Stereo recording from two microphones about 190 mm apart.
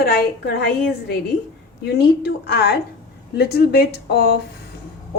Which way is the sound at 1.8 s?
60° left (ahead or behind).